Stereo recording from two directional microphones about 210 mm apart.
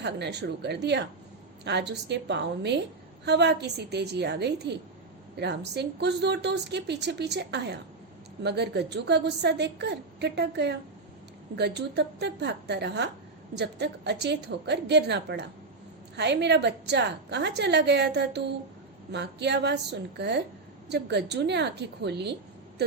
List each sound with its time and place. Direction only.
0.0 s a woman's voice: 55° right (ahead or behind)